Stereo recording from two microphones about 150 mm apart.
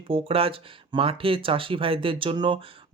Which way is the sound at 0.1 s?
40° right (ahead or behind).